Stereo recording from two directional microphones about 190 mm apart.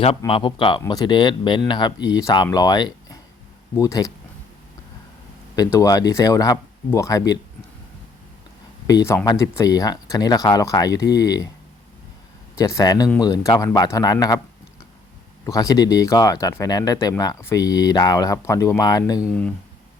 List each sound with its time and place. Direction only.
0.3 s speech: 30° left (ahead or behind)
5.5 s speech: 20° left (ahead or behind)
8.9 s speech: 15° left (ahead or behind)
12.5 s speech: 15° left (ahead or behind)
15.4 s speech: 20° left (ahead or behind)